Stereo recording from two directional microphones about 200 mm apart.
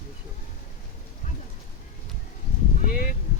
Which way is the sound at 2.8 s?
45° left (ahead or behind).